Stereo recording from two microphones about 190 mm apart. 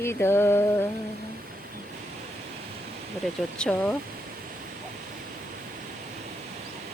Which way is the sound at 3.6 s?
5° left (ahead or behind).